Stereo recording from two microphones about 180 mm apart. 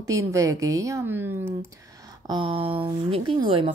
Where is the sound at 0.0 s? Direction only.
15° right (ahead or behind).